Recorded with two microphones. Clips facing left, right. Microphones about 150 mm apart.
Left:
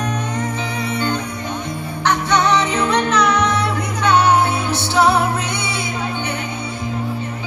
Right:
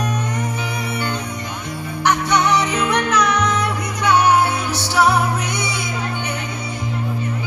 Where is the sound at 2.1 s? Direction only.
10° right (ahead or behind).